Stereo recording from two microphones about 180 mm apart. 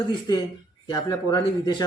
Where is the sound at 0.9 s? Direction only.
20° left (ahead or behind).